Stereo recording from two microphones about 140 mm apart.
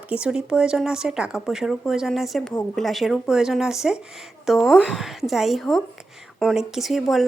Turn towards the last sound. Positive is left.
turn(degrees=0)  # may be behind; listen again after turning